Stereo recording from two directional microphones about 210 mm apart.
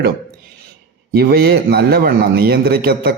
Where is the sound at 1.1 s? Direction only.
50° right (ahead or behind).